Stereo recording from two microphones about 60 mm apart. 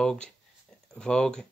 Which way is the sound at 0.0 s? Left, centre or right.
Centre.